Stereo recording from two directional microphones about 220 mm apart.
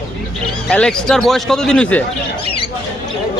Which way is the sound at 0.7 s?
5° left (ahead or behind).